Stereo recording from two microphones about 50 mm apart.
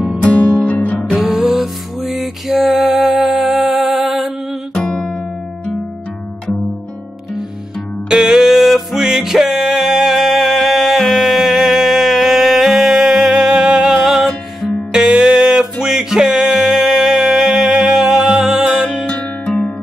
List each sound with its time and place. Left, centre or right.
0.2 s music: left
1.3 s music: centre
4.8 s music: centre
8.1 s music: centre
14.9 s music: centre
19.0 s music: centre